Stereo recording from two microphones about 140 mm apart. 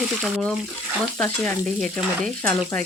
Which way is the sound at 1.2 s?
5° left (ahead or behind).